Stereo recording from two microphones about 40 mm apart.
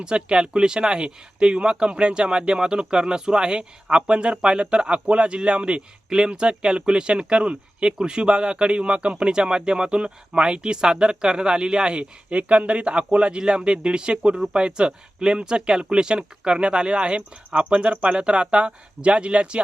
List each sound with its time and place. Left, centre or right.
0.0 s speech: right